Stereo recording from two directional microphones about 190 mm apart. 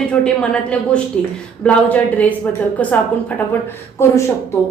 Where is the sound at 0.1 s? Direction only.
5° left (ahead or behind).